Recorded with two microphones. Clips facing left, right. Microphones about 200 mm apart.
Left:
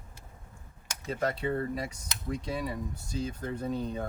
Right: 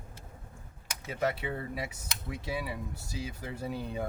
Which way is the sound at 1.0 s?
5° right (ahead or behind).